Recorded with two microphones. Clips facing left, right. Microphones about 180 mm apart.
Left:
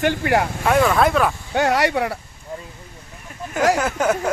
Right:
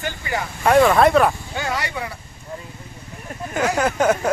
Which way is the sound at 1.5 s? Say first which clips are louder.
Left 8 dB; 70° left (ahead or behind).